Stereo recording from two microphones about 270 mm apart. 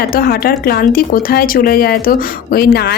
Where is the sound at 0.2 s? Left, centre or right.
Left.